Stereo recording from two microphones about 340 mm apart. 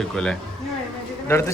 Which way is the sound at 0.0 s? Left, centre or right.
Centre.